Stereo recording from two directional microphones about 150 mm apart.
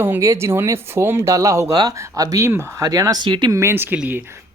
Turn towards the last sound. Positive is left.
turn(degrees=-10)  # may be behind; listen again after turning